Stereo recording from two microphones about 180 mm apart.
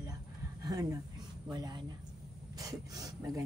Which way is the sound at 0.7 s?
20° right (ahead or behind).